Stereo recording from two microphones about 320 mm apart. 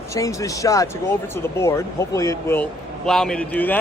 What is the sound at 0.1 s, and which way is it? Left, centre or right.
Speech, centre.